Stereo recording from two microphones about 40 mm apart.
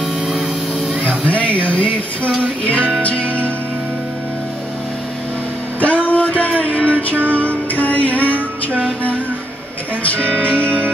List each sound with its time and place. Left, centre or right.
0.3 s a sound: centre
1.2 s speech: left
3.0 s music: left
5.8 s music: left
10.0 s speech: left